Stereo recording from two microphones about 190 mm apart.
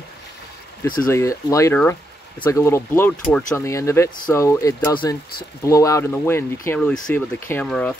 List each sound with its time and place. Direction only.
1.0 s speech: 15° left (ahead or behind)